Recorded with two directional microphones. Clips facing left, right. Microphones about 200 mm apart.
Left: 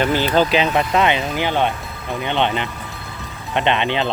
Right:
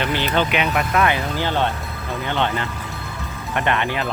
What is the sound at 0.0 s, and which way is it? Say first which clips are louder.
Speech: left 4 dB; 40° left (ahead or behind).